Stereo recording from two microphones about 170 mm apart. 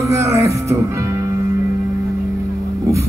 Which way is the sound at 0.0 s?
15° right (ahead or behind).